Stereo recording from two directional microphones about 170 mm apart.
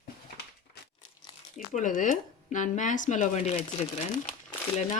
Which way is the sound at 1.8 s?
50° left (ahead or behind).